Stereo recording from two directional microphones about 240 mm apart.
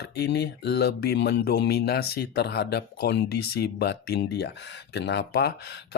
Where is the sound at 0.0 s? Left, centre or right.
Left.